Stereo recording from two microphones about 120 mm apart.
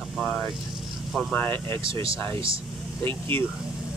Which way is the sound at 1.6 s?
45° right (ahead or behind).